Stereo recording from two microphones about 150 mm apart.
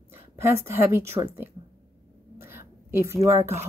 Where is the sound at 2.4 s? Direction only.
15° right (ahead or behind).